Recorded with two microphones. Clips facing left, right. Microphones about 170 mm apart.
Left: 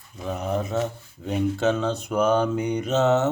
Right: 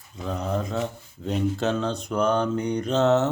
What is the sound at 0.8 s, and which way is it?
Speech, 5° left (ahead or behind).